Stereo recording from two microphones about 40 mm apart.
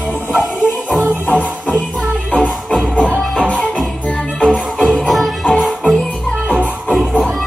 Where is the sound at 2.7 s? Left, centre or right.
Left.